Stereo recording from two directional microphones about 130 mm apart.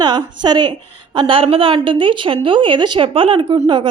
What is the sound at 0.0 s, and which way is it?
A woman's voice, 35° right (ahead or behind).